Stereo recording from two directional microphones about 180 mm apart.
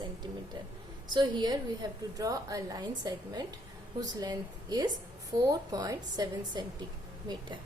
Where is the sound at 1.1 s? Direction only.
25° right (ahead or behind).